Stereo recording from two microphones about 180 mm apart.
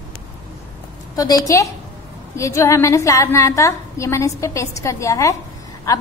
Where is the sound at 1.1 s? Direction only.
20° left (ahead or behind).